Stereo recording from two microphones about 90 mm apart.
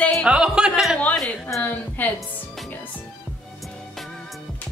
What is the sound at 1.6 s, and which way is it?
Speech, 20° left (ahead or behind).